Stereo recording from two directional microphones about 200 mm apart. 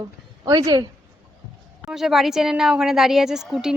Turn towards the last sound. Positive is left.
turn(degrees=0)  # may be behind; listen again after turning